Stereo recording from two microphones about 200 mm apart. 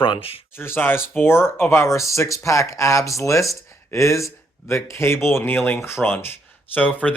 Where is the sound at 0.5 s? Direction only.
10° left (ahead or behind).